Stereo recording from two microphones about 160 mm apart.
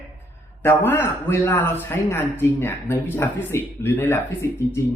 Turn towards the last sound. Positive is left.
turn(degrees=15)  # may be behind; listen again after turning